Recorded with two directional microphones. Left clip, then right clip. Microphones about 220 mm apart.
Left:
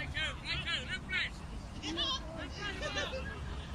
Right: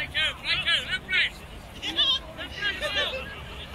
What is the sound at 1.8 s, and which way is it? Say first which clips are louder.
Hubbub: right 12 dB; 5° left (ahead or behind).